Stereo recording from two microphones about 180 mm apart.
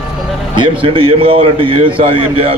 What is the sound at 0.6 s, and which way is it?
A man's voice, 30° right (ahead or behind).